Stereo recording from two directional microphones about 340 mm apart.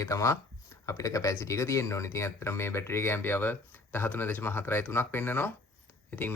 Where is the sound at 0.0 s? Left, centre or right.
Centre.